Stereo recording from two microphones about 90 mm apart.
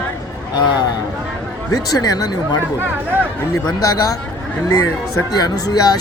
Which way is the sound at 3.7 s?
45° left (ahead or behind).